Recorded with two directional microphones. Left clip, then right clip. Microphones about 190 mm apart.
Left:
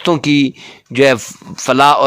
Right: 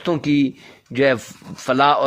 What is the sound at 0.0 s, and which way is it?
Speech, 35° left (ahead or behind).